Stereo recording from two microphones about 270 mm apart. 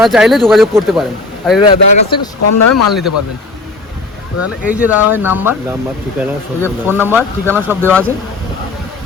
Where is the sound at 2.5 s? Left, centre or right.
Left.